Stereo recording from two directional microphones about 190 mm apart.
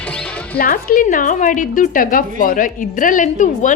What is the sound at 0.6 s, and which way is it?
A woman's voice, 45° left (ahead or behind).